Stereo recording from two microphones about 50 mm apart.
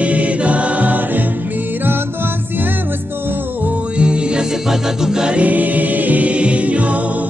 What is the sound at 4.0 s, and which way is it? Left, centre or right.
Music, right.